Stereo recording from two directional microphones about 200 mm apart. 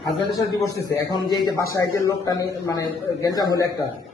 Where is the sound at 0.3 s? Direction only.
20° left (ahead or behind).